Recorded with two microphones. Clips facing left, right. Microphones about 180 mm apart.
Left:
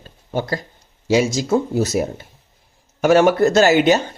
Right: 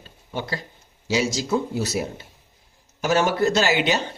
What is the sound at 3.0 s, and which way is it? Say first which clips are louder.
Speech: left 7 dB; 55° left (ahead or behind).